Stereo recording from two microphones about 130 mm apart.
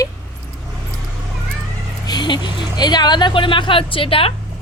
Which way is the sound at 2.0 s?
35° left (ahead or behind).